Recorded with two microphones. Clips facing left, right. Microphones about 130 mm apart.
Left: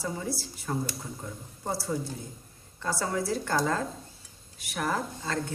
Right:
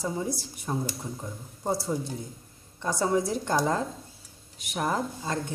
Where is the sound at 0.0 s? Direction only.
20° right (ahead or behind).